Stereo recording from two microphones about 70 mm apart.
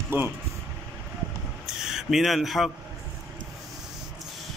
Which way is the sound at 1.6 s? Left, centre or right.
Centre.